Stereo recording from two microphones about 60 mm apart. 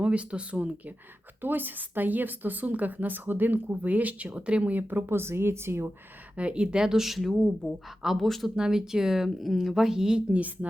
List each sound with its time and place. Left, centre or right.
0.0 s speech: centre
1.4 s speech: right
6.3 s speech: centre
8.5 s speech: centre
10.3 s speech: right